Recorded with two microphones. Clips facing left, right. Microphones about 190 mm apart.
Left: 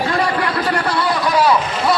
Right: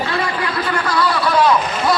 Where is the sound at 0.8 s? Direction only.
25° left (ahead or behind).